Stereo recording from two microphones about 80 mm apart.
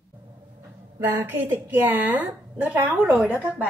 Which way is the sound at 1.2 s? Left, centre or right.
Right.